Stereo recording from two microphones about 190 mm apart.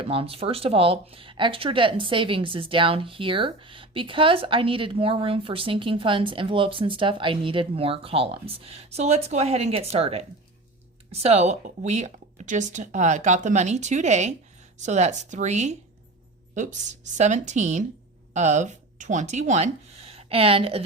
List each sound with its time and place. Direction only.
0.0 s speech: 30° right (ahead or behind)